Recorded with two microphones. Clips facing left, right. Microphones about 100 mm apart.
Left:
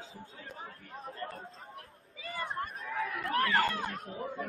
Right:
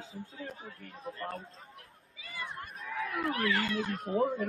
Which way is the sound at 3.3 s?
45° left (ahead or behind).